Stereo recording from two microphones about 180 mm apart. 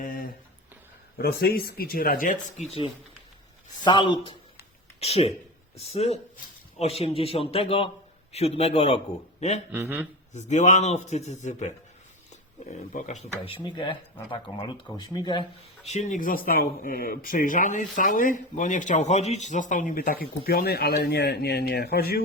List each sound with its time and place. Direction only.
0.0 s a sound: 50° left (ahead or behind)
1.2 s a man's voice: 60° left (ahead or behind); by 9.0 s 35° left (ahead or behind)
9.7 s speech: 10° right (ahead or behind)
10.3 s a man's voice: 40° left (ahead or behind); by 15.4 s 25° left (ahead or behind)
15.9 s speech: 40° left (ahead or behind); by 22.2 s 60° left (ahead or behind)